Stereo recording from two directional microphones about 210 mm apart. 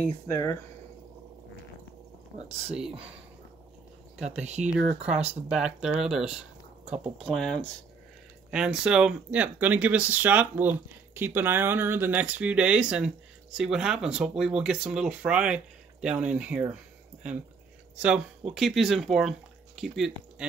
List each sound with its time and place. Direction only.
0.0 s speech: 15° left (ahead or behind)
2.3 s speech: 30° right (ahead or behind)
4.2 s speech: 35° right (ahead or behind)
5.5 s speech: 5° right (ahead or behind)
17.9 s speech: 5° right (ahead or behind)